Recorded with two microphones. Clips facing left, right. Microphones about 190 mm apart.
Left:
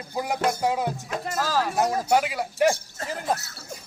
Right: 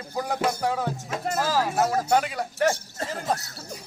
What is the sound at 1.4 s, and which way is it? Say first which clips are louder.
Speech: even; 15° right (ahead or behind).